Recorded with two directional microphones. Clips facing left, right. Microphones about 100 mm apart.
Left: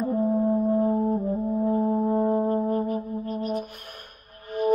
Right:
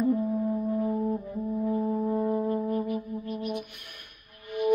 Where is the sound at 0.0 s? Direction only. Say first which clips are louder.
Left 3 dB; 40° left (ahead or behind).